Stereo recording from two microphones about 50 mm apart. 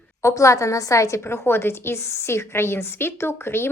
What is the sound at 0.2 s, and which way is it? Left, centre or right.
A woman's voice, left.